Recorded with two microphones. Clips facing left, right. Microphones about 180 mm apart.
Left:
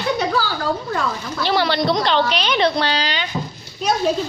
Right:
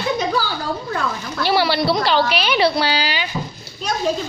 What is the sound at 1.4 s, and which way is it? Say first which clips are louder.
A woman's voice: right 1 dB; 10° right (ahead or behind).